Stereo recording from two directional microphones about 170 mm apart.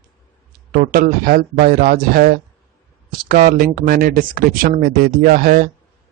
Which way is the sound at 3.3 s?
55° right (ahead or behind).